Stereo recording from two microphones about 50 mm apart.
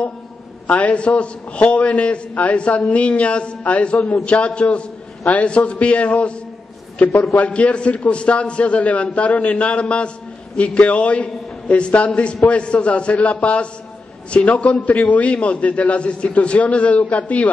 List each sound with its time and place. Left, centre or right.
0.7 s a man's voice: left
7.3 s a man's voice: left